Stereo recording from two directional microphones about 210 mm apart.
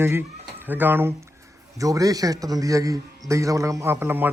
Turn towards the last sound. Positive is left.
turn(degrees=-10)  # may be behind; listen again after turning